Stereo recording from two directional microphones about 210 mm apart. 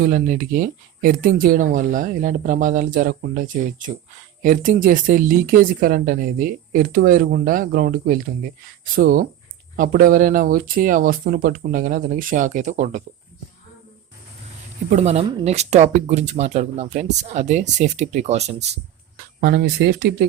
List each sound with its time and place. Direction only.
0.0 s speech: 40° right (ahead or behind)
14.8 s speech: 30° right (ahead or behind)
19.4 s speech: 45° right (ahead or behind)